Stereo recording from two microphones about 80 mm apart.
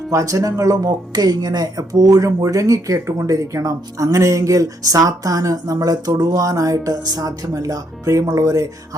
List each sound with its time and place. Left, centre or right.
0.1 s speech: right